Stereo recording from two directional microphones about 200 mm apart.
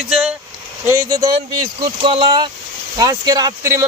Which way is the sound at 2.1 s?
25° right (ahead or behind).